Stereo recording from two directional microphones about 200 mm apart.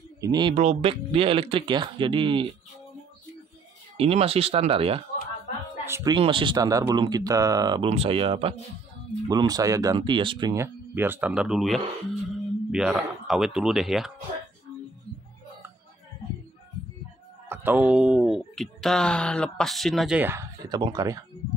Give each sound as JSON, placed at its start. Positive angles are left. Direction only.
{"t": 0.2, "sound": "speech", "side_deg": -20}
{"t": 0.6, "sound": "speech", "side_deg": -30}
{"t": 3.9, "sound": "speech", "side_deg": -30}
{"t": 5.9, "sound": "speech", "side_deg": -15}
{"t": 6.1, "sound": "speech", "side_deg": -25}
{"t": 17.5, "sound": "speech", "side_deg": -10}